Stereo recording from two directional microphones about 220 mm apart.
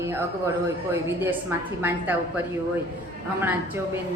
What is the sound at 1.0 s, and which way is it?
A woman's voice, 10° right (ahead or behind).